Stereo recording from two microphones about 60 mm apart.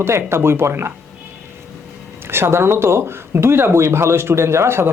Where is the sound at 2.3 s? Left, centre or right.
Right.